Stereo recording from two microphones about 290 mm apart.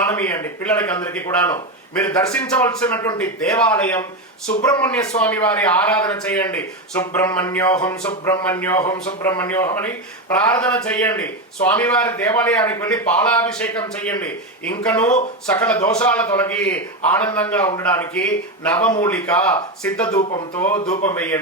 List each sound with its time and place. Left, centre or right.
0.0 s a man's voice: centre
4.4 s a man's voice: centre
20.1 s speech: left
21.0 s a man's voice: centre